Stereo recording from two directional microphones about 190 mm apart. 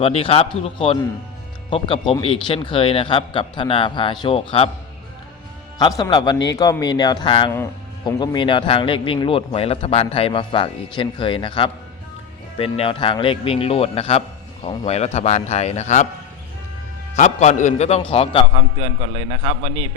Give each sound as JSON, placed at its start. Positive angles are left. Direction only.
{"t": 0.0, "sound": "speech", "side_deg": 30}
{"t": 5.8, "sound": "a man's voice", "side_deg": 20}
{"t": 17.2, "sound": "a man's voice", "side_deg": 40}
{"t": 18.5, "sound": "a man's voice", "side_deg": -30}